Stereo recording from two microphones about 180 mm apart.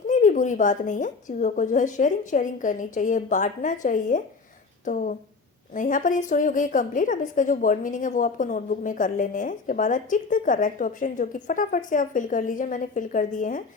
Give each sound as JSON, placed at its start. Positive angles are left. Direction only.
{"t": 0.1, "sound": "a woman's voice", "side_deg": 45}